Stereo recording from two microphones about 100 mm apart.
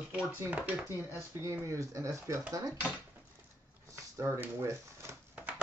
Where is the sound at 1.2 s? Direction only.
25° right (ahead or behind).